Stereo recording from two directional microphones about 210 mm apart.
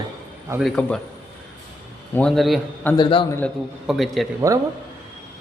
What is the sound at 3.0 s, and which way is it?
Speech, 25° left (ahead or behind).